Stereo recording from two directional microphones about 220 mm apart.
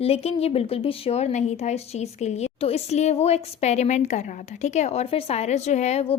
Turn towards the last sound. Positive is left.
turn(degrees=30)  # may be behind; listen again after turning